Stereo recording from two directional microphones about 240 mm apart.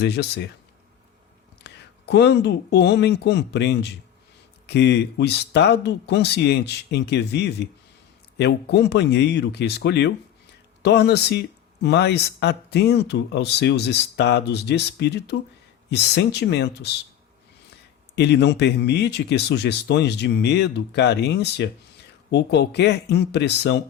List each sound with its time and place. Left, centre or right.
0.0 s speech: left
1.6 s speech: left
18.1 s speech: left